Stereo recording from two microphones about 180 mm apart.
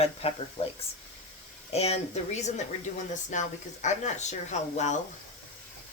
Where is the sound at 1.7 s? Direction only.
35° left (ahead or behind).